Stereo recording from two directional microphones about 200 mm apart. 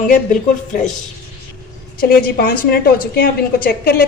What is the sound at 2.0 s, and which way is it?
A woman's voice, 50° left (ahead or behind).